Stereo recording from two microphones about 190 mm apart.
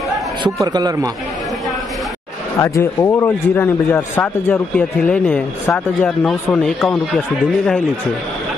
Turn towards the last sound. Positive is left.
turn(degrees=0)  # may be behind; listen again after turning